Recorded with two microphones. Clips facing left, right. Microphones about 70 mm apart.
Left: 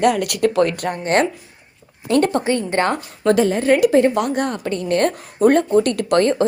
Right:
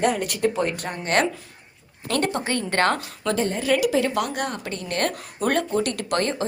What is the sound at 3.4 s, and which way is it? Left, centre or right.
Speech, left.